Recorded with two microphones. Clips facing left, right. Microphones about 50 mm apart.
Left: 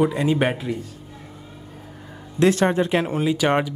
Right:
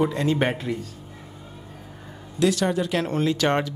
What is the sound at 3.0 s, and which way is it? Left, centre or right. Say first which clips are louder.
Speech: left 1 dB; centre.